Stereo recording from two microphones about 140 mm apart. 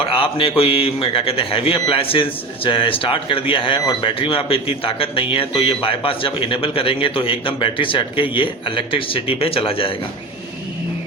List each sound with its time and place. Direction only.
0.0 s speech: 40° left (ahead or behind)